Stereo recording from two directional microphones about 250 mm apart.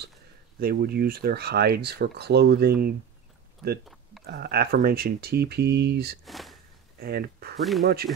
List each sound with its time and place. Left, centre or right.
0.6 s speech: right
4.3 s speech: right
6.2 s speech: centre
7.0 s speech: right
7.5 s speech: centre
7.8 s speech: right